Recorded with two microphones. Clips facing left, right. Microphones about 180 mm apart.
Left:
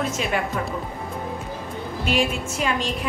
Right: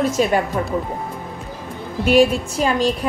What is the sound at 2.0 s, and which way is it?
Speech, 40° right (ahead or behind).